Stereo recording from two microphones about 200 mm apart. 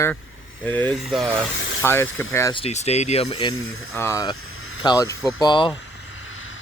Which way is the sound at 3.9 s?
15° left (ahead or behind).